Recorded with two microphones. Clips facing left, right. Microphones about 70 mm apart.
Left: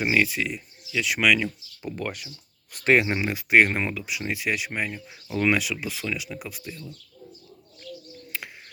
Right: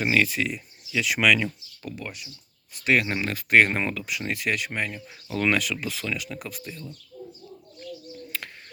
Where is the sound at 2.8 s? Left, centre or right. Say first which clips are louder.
Left 3 dB; left.